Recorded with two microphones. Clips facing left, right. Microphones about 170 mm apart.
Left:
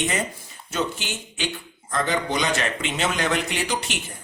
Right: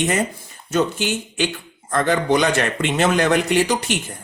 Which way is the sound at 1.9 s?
55° right (ahead or behind).